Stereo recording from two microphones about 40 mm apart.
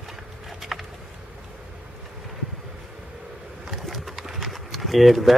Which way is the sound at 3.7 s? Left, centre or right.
Centre.